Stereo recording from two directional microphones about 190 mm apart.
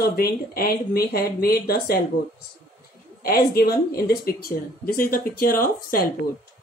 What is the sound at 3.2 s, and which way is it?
Speech, 55° left (ahead or behind).